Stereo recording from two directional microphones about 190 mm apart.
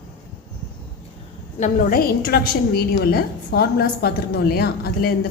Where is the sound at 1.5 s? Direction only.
40° left (ahead or behind).